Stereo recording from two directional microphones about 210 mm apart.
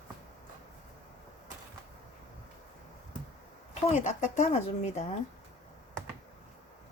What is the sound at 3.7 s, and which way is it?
Speech, 35° left (ahead or behind).